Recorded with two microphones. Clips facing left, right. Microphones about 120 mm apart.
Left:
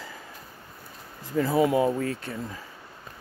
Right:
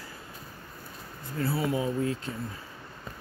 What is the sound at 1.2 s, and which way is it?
Speech, 90° left.